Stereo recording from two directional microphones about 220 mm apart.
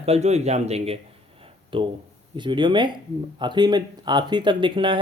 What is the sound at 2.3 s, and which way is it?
Speech, 20° right (ahead or behind).